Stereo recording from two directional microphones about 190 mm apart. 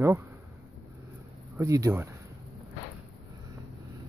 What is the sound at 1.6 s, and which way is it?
Speech, 15° right (ahead or behind).